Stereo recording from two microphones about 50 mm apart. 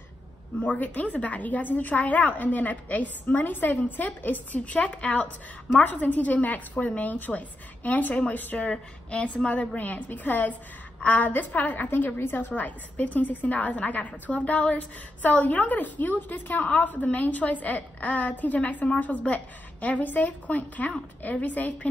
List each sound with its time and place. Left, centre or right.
0.6 s a woman's voice: left
8.6 s a woman's voice: left
9.8 s a woman's voice: left